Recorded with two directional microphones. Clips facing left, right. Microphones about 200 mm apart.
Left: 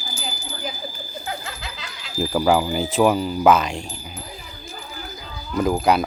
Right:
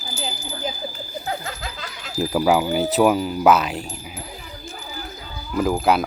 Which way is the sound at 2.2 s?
5° right (ahead or behind).